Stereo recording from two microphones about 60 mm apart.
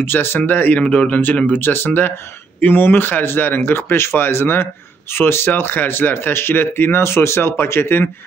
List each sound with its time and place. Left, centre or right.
0.0 s speech: left
1.6 s speech: left